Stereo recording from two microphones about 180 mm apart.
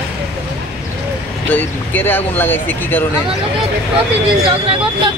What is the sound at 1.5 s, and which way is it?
Speech, 10° left (ahead or behind).